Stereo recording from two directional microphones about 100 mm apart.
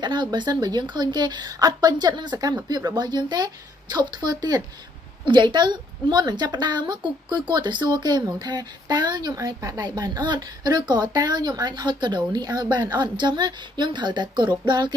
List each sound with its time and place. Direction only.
0.0 s speech: 50° right (ahead or behind)